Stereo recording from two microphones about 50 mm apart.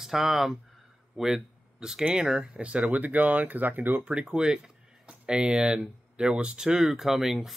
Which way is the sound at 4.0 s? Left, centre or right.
Centre.